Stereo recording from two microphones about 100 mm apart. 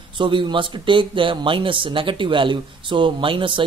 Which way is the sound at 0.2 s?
55° right (ahead or behind).